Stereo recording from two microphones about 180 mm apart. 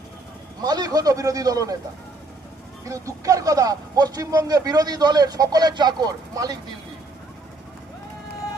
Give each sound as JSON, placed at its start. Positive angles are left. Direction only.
{"t": 0.6, "sound": "a man's voice", "side_deg": -20}
{"t": 2.8, "sound": "a man's voice", "side_deg": -20}